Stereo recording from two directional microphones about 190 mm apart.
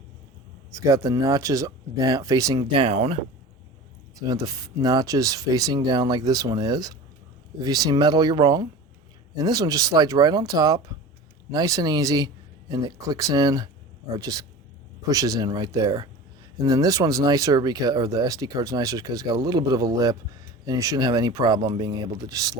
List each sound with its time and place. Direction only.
0.7 s speech: 15° right (ahead or behind)
2.7 s speech: 30° right (ahead or behind)
4.2 s speech: 20° right (ahead or behind)